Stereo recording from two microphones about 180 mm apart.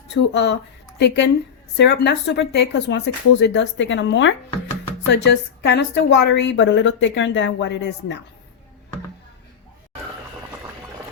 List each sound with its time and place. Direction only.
0.1 s a woman's voice: 70° left (ahead or behind); by 4.4 s 90° left
5.0 s a woman's voice: 70° left (ahead or behind)